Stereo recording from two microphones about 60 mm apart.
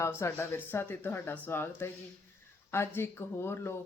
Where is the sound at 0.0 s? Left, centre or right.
Left.